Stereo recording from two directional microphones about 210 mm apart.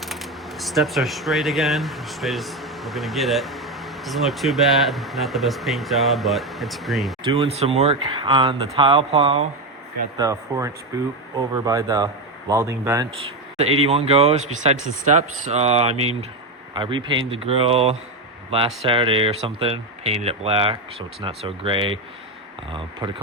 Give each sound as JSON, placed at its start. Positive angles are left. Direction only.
{"t": 0.0, "sound": "speech", "side_deg": 0}
{"t": 7.3, "sound": "speech", "side_deg": -25}
{"t": 10.2, "sound": "speech", "side_deg": -15}
{"t": 13.8, "sound": "speech", "side_deg": -30}